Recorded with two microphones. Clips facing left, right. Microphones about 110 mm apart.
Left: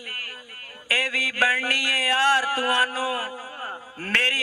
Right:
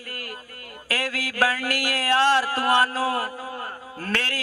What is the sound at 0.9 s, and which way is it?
A man's voice, 20° right (ahead or behind).